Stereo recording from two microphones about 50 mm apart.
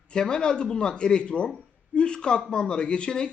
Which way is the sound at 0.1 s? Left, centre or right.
Centre.